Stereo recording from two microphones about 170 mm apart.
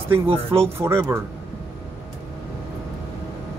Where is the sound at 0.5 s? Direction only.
15° right (ahead or behind).